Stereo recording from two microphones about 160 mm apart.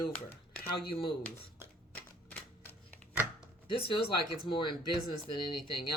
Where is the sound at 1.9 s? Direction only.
10° left (ahead or behind).